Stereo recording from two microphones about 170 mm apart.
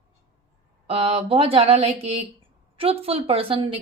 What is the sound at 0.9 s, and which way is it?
A woman's voice, 35° right (ahead or behind).